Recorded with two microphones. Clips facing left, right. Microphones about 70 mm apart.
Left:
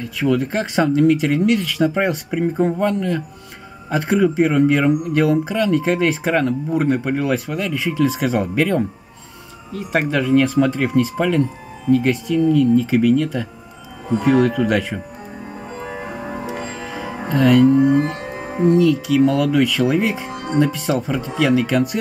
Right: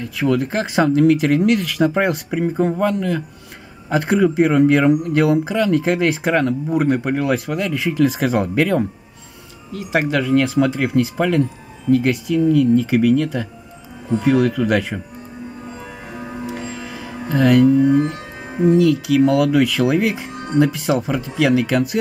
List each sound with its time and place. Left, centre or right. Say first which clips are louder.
0.2 s speech: even; centre
15.8 s music: left 4 dB; left
16.8 s music: left 3 dB; centre
17.3 s speech: even; centre
17.6 s speech: even; left
18.7 s speech: right 1 dB; centre